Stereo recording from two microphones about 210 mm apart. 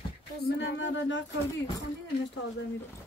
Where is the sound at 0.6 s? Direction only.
60° left (ahead or behind).